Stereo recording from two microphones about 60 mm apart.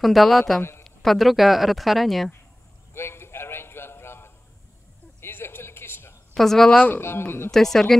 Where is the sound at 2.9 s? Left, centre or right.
Left.